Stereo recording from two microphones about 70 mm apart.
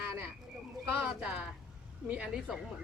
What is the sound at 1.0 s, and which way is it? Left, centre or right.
Speech, centre.